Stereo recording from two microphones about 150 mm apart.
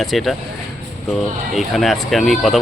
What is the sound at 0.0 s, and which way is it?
Speech, centre (ahead or behind).